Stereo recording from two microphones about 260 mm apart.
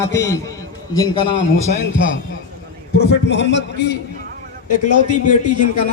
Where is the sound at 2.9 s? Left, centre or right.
Left.